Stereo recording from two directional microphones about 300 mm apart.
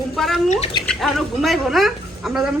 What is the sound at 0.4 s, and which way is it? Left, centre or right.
Speech, left.